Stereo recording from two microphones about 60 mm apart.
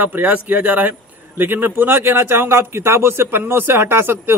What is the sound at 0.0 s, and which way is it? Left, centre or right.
Speech, right.